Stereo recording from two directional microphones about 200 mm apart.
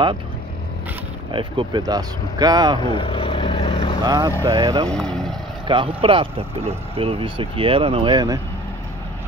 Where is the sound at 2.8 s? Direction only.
25° left (ahead or behind).